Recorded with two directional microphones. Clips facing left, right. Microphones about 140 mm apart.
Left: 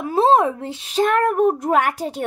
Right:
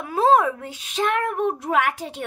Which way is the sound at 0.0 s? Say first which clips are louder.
Left 2 dB; 25° left (ahead or behind).